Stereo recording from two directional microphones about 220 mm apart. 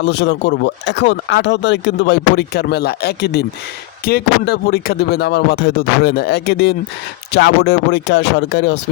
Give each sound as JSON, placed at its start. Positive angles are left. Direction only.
{"t": 0.0, "sound": "speech", "side_deg": 50}